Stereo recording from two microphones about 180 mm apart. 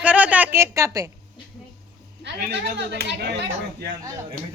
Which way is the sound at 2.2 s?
75° right (ahead or behind).